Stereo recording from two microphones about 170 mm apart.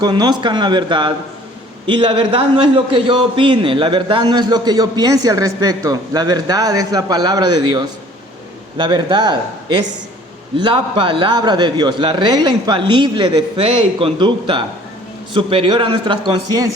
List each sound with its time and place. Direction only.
0.0 s a man's voice: 25° right (ahead or behind)